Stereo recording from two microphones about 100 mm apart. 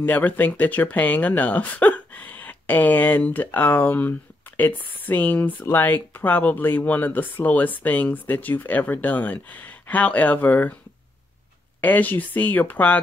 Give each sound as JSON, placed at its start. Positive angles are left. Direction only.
{"t": 0.0, "sound": "speech", "side_deg": 20}
{"t": 11.8, "sound": "speech", "side_deg": 15}